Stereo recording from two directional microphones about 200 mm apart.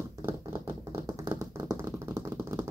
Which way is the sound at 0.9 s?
20° right (ahead or behind).